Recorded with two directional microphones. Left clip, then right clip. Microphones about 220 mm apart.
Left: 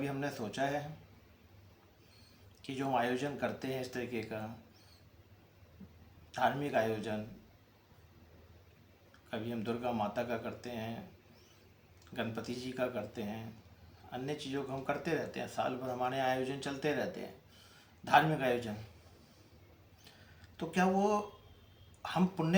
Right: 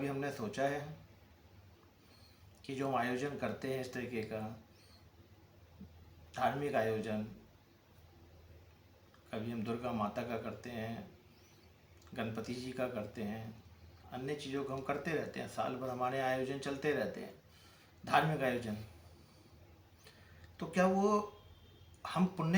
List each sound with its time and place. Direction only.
0.0 s speech: 10° left (ahead or behind)
2.6 s speech: 10° left (ahead or behind)
6.3 s speech: 10° left (ahead or behind)
9.3 s speech: 10° left (ahead or behind)
12.1 s speech: 10° left (ahead or behind)
20.6 s speech: 10° left (ahead or behind)